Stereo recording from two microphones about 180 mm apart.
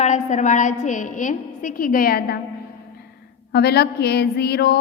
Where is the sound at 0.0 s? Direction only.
40° left (ahead or behind); by 2.4 s 60° left (ahead or behind).